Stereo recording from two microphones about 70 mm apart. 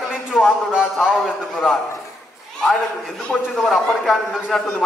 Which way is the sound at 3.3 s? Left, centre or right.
Centre.